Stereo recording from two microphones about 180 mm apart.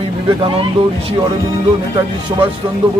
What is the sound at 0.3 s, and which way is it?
Speech, 25° right (ahead or behind).